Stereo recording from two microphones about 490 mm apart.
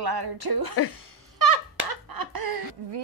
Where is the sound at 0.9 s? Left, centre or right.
Right.